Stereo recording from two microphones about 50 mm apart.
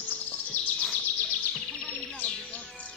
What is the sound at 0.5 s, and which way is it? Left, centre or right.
Bird vocalization, left.